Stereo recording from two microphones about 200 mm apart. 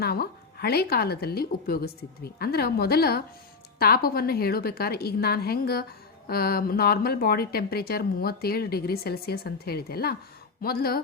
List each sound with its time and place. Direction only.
0.0 s speech: 50° left (ahead or behind)